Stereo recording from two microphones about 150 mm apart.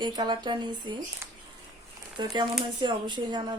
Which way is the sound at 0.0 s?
30° right (ahead or behind).